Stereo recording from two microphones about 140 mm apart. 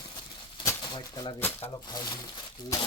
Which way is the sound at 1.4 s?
15° left (ahead or behind).